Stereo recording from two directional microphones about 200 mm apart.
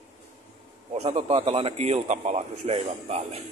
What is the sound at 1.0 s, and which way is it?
A man's voice, 30° right (ahead or behind).